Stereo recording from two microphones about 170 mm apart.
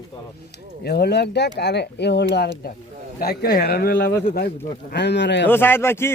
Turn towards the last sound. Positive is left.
turn(degrees=15)  # may be behind; listen again after turning